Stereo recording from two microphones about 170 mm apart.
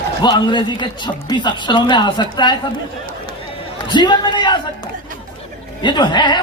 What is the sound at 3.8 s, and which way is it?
Speech, 25° left (ahead or behind).